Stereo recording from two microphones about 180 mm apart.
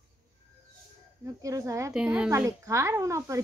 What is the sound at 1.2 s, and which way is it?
Speech, 20° right (ahead or behind).